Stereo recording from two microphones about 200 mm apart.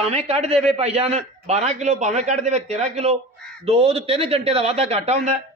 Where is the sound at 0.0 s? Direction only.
30° right (ahead or behind).